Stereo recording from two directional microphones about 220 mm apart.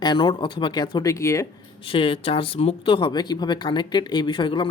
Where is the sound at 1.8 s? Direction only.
25° left (ahead or behind).